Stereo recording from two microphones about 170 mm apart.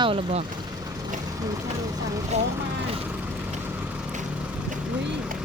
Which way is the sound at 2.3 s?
40° right (ahead or behind).